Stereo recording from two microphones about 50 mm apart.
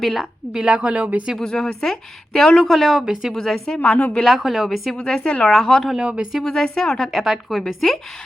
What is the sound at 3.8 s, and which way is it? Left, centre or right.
Speech, left.